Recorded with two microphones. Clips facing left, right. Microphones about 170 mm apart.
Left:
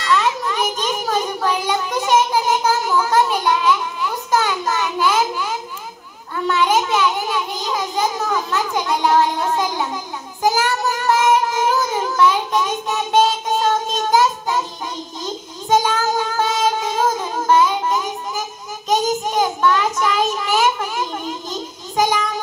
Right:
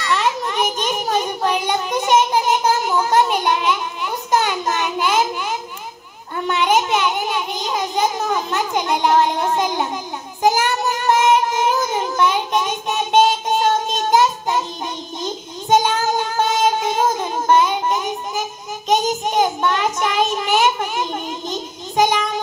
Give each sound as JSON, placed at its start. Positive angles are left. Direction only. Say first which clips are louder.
{"t": 0.1, "sound": "a sound", "louder": "left 2 dB", "side_deg": -20}
{"t": 6.4, "sound": "a child's voice", "louder": "even", "side_deg": -20}
{"t": 11.6, "sound": "child singing", "louder": "even", "side_deg": -20}